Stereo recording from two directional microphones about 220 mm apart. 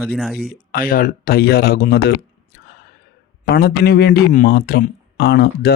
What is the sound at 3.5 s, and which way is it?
Speech, 45° left (ahead or behind).